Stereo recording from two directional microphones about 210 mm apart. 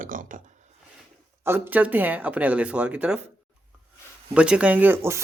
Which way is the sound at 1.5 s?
10° right (ahead or behind).